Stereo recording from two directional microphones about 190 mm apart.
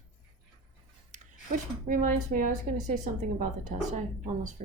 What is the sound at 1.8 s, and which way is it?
A woman's voice, 45° right (ahead or behind).